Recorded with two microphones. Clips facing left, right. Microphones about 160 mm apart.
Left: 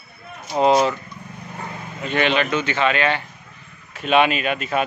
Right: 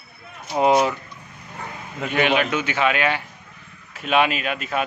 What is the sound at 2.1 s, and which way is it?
A man's voice, 10° right (ahead or behind).